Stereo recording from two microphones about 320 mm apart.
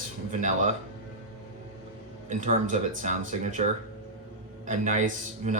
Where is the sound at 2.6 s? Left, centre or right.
Right.